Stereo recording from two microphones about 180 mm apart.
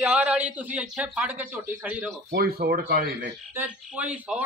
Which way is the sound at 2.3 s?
60° right (ahead or behind).